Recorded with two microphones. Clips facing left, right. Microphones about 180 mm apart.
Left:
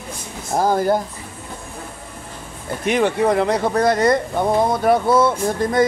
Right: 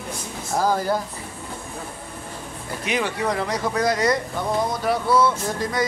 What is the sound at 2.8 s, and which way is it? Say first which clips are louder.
Speech: left 7 dB; 55° left (ahead or behind).